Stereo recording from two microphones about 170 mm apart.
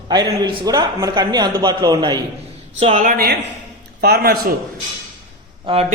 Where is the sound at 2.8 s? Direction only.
35° right (ahead or behind).